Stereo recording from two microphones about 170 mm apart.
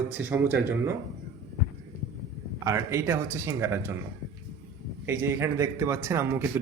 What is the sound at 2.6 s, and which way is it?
A man's voice, 15° right (ahead or behind).